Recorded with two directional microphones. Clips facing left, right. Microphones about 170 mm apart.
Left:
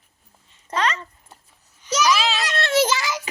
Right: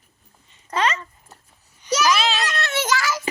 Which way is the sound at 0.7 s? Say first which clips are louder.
Right 1 dB; 5° right (ahead or behind).